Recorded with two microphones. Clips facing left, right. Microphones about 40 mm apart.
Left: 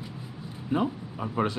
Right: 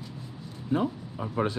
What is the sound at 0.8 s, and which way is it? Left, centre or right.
Speech, left.